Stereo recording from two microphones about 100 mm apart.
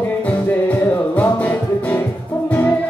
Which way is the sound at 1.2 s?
15° left (ahead or behind).